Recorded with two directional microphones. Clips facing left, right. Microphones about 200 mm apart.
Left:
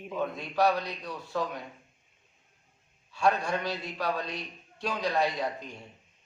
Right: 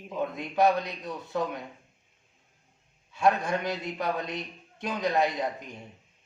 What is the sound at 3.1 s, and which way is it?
A man's voice, 20° right (ahead or behind).